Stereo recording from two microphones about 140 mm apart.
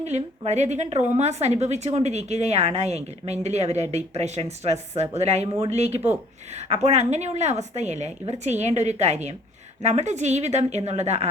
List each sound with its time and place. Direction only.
0.0 s a woman's voice: 55° right (ahead or behind)